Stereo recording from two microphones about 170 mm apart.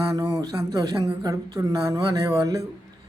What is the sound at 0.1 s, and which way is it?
Speech, 20° right (ahead or behind).